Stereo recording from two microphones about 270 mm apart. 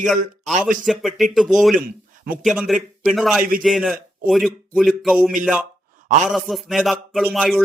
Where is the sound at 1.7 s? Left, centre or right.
Right.